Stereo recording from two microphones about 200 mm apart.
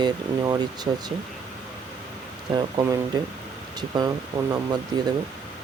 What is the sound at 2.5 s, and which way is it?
Speech, 20° right (ahead or behind).